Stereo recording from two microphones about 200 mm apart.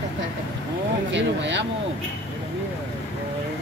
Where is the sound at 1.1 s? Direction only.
65° right (ahead or behind).